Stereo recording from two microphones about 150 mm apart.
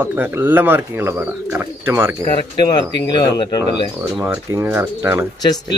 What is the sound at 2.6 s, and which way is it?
Speech, 30° left (ahead or behind).